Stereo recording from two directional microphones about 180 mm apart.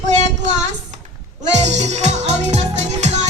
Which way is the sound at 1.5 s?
40° right (ahead or behind).